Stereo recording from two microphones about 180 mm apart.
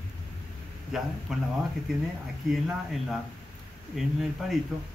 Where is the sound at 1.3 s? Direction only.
Centre (ahead or behind).